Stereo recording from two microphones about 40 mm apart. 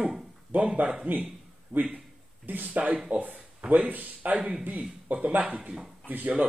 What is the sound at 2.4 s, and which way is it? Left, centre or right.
Speech, right.